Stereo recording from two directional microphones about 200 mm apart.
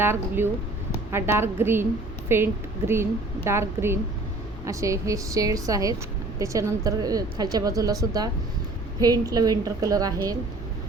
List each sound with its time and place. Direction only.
0.0 s a woman's voice: 10° right (ahead or behind)